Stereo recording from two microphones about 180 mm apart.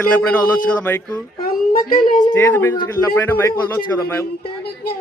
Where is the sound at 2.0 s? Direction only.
50° left (ahead or behind).